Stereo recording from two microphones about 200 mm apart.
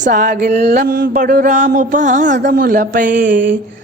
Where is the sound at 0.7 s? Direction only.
45° right (ahead or behind).